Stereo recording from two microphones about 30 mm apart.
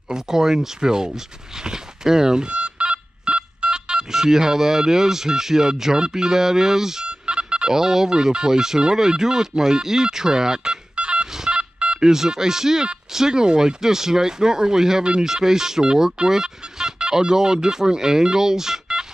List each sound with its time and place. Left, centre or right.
0.1 s speech: centre
2.5 s telephone dialing: right
4.1 s speech: centre
7.1 s telephone dialing: right
7.7 s speech: centre
11.0 s telephone dialing: right
12.1 s speech: centre